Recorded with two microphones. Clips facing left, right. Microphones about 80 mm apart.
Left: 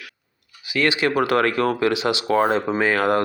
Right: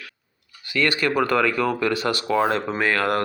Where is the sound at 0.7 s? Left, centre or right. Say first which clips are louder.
Left 1 dB; centre.